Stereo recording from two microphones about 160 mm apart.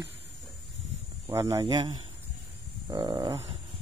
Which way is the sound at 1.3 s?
20° right (ahead or behind).